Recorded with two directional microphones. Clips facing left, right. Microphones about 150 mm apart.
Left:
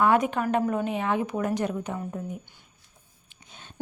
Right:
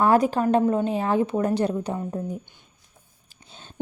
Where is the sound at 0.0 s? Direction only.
35° right (ahead or behind).